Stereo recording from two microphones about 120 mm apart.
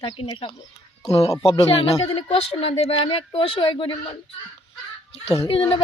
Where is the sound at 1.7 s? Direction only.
50° left (ahead or behind).